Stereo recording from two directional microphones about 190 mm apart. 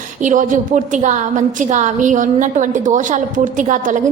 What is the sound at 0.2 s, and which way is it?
A woman's voice, 40° right (ahead or behind).